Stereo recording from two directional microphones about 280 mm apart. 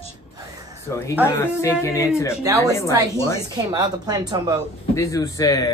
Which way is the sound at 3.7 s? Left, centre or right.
Centre.